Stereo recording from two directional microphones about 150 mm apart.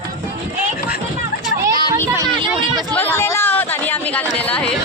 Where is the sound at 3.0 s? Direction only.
15° left (ahead or behind).